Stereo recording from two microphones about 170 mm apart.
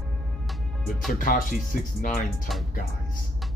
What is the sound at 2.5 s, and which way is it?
Speech, centre (ahead or behind).